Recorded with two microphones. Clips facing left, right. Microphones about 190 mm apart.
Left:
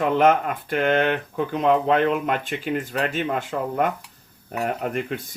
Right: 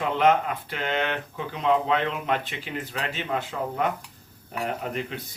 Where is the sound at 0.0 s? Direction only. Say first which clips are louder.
Left 3 dB; 50° left (ahead or behind).